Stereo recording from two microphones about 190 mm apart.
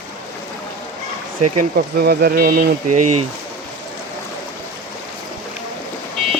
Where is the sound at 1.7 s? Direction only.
55° right (ahead or behind).